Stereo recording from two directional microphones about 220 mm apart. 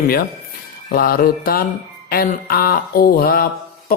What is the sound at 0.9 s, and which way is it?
Music, 40° left (ahead or behind).